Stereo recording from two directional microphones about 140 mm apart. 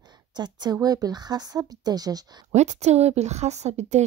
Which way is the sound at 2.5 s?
55° right (ahead or behind).